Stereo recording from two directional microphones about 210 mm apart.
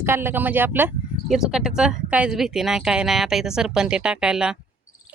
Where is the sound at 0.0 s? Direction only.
10° right (ahead or behind).